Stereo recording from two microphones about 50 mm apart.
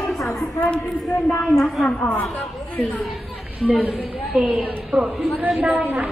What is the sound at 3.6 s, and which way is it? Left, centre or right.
Speech, right.